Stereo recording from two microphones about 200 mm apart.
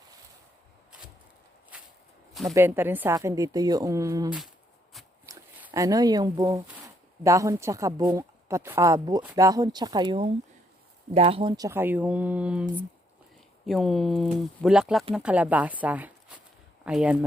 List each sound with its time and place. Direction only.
1.7 s walk: 5° right (ahead or behind)
2.5 s a woman's voice: 10° right (ahead or behind)